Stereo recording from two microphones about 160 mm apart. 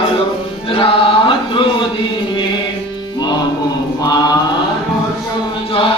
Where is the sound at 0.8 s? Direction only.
35° left (ahead or behind).